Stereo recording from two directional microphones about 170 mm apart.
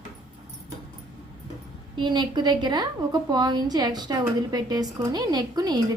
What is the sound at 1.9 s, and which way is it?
A woman's voice, 25° right (ahead or behind).